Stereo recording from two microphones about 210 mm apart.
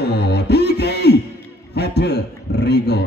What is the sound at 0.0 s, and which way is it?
Beatboxing, 50° left (ahead or behind).